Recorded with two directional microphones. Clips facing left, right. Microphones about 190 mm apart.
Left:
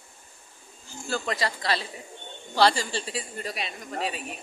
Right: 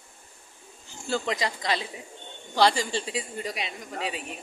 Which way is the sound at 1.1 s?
20° right (ahead or behind).